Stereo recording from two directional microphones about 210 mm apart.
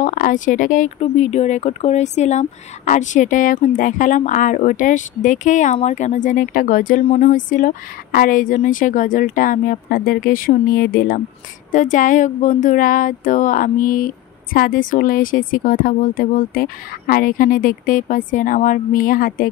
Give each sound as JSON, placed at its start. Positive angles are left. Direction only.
{"t": 0.0, "sound": "speech", "side_deg": 40}